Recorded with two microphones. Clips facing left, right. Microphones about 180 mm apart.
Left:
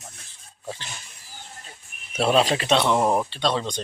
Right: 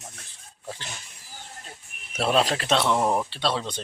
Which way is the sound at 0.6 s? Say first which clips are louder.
Left 3 dB; centre (ahead or behind).